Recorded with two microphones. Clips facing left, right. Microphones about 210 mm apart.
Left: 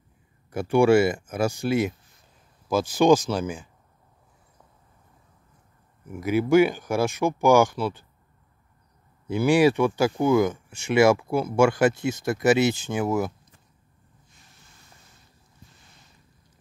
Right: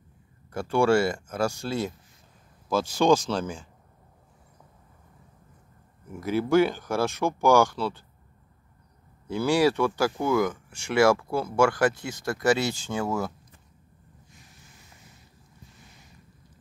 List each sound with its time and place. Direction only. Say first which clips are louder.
0.5 s speech: left 4 dB; 15° left (ahead or behind)
6.1 s speech: left 3 dB; 10° left (ahead or behind)
9.3 s speech: left 3 dB; 20° left (ahead or behind)